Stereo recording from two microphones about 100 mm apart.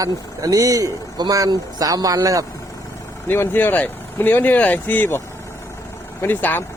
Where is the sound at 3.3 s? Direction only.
20° left (ahead or behind).